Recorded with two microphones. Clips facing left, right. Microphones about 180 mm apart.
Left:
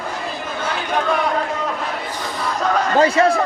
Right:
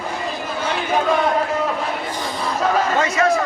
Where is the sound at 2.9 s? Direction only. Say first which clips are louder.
Left 3 dB; 30° left (ahead or behind).